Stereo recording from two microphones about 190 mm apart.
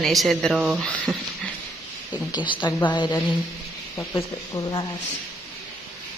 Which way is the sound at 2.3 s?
25° left (ahead or behind).